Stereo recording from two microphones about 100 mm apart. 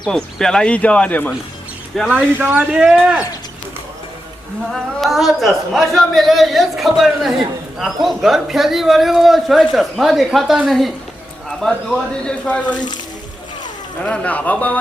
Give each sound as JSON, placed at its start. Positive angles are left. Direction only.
{"t": 0.0, "sound": "speech", "side_deg": 5}
{"t": 2.0, "sound": "speech", "side_deg": -15}
{"t": 2.7, "sound": "speech", "side_deg": -5}
{"t": 4.7, "sound": "speech", "side_deg": 0}
{"t": 12.7, "sound": "speech", "side_deg": 45}
{"t": 14.0, "sound": "speech", "side_deg": 10}